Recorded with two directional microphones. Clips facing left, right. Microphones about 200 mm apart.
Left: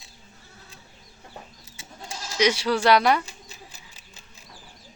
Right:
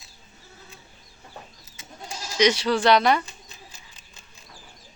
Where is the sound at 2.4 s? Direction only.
10° left (ahead or behind).